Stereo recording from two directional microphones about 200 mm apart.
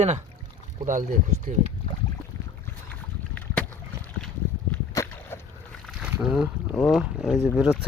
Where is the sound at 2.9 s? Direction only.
10° left (ahead or behind).